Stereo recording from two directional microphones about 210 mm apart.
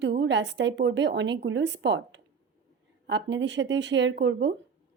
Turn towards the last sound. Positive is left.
turn(degrees=-60)  # may be behind; listen again after turning